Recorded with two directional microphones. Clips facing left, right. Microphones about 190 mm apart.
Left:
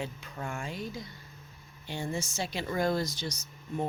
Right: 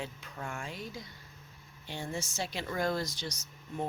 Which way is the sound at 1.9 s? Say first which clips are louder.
Left 3 dB; centre (ahead or behind).